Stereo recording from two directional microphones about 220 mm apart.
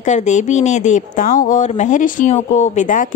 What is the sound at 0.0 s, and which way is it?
A woman's voice, 35° left (ahead or behind).